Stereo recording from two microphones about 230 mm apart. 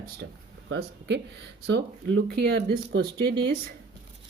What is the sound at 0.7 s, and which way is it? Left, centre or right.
Speech, right.